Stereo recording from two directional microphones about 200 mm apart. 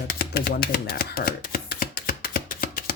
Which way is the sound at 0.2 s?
50° left (ahead or behind).